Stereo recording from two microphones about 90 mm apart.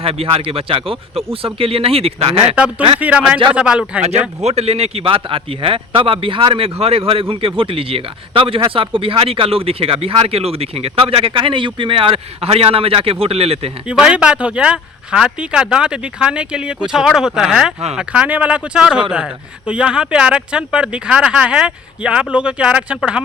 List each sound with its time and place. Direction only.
0.0 s speech: 90° right
2.6 s speech: 10° right (ahead or behind)
4.6 s speech: 90° right
13.8 s speech: 10° right (ahead or behind)